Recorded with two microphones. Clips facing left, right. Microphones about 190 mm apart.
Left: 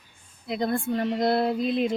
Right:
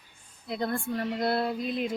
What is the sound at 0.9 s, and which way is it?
Female singing, 20° left (ahead or behind).